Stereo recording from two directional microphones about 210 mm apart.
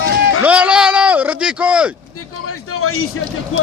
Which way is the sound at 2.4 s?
90° left.